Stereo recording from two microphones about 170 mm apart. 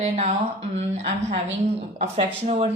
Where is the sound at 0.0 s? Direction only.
40° right (ahead or behind).